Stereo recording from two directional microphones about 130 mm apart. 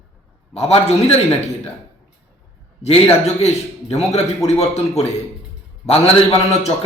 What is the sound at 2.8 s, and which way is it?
A man's voice, 55° left (ahead or behind).